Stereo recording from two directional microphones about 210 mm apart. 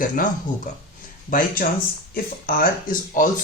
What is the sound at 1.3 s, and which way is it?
Speech, 40° left (ahead or behind).